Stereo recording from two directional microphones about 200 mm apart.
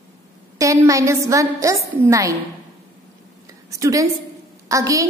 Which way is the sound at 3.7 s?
15° right (ahead or behind).